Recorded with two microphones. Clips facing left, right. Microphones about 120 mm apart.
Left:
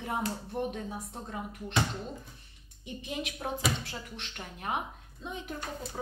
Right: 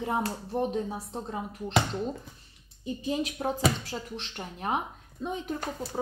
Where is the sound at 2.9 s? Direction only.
30° right (ahead or behind).